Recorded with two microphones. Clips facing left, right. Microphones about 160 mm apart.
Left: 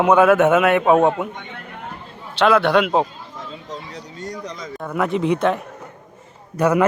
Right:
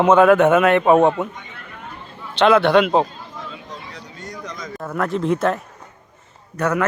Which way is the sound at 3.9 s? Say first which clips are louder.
Left 4 dB; 35° left (ahead or behind).